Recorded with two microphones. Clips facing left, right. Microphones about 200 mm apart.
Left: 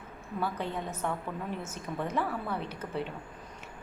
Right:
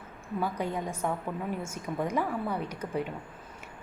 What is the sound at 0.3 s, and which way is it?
A woman's voice, 10° right (ahead or behind).